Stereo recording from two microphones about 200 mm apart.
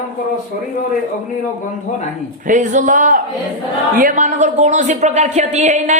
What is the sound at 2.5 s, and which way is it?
Speech, 40° right (ahead or behind).